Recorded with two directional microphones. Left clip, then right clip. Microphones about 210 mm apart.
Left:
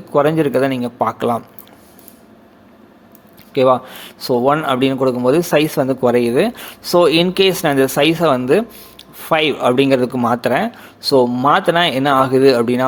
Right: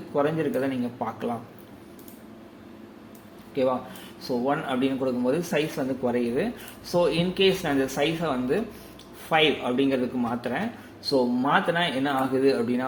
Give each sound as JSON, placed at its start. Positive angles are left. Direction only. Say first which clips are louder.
{"t": 0.1, "sound": "speech", "louder": "left 11 dB", "side_deg": 50}
{"t": 3.5, "sound": "a man's voice", "louder": "left 12 dB", "side_deg": 55}